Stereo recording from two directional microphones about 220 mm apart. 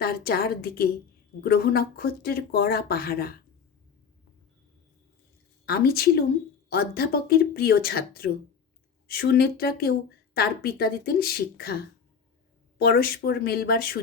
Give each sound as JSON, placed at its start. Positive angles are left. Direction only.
{"t": 0.0, "sound": "speech", "side_deg": 45}
{"t": 5.6, "sound": "speech", "side_deg": 45}
{"t": 12.8, "sound": "speech", "side_deg": 45}